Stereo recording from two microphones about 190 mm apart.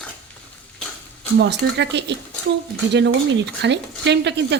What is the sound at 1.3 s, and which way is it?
A woman's voice, 65° right (ahead or behind).